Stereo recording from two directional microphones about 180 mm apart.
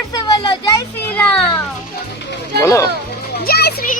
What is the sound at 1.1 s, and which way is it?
Speech, 10° left (ahead or behind).